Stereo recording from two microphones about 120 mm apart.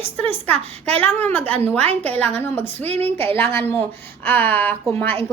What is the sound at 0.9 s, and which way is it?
Speech, 15° left (ahead or behind).